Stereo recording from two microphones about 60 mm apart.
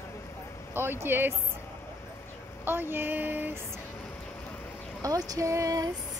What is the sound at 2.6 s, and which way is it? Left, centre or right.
Speech, right.